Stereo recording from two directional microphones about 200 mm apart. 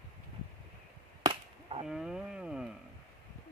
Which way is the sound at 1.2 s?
25° right (ahead or behind).